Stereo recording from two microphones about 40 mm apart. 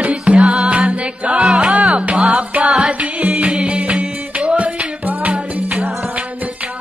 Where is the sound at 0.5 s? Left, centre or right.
Right.